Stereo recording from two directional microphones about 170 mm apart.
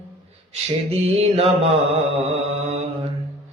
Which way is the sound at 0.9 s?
35° right (ahead or behind).